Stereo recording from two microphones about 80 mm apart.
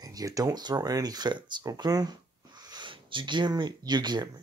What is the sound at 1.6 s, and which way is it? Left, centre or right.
Speech, right.